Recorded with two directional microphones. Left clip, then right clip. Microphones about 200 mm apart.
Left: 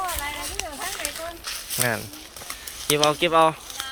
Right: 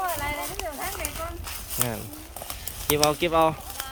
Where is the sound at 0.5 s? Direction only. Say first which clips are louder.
Left 1 dB; 55° right (ahead or behind).